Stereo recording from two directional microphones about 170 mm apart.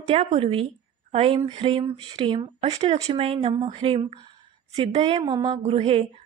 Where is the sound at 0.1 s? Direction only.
35° right (ahead or behind).